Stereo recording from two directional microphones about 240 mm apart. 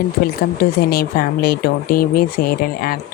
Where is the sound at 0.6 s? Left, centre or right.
Left.